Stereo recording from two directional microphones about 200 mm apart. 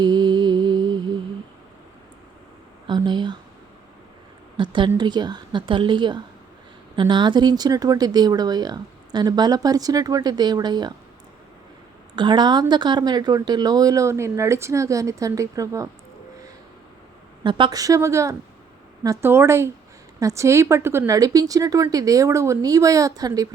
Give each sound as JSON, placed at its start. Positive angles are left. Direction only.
{"t": 0.0, "sound": "mantra", "side_deg": -20}
{"t": 2.8, "sound": "a sound", "side_deg": -20}
{"t": 4.5, "sound": "a sound", "side_deg": -25}
{"t": 4.9, "sound": "speech", "side_deg": -20}
{"t": 12.1, "sound": "a woman's voice", "side_deg": -25}
{"t": 17.4, "sound": "a woman's voice", "side_deg": -25}